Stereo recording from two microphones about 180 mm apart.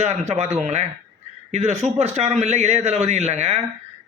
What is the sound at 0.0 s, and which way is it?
Speech, 35° right (ahead or behind).